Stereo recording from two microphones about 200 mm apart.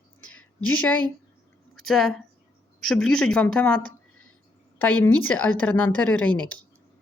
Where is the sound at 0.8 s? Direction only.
5° left (ahead or behind).